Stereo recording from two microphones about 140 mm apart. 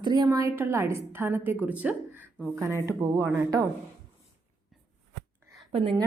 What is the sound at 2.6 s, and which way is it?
Speech, 20° right (ahead or behind).